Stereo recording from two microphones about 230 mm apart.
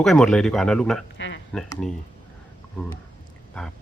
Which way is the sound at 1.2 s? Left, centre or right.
Left.